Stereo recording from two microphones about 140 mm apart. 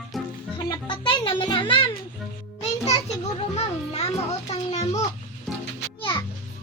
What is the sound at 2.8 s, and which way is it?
A child's voice, 50° left (ahead or behind).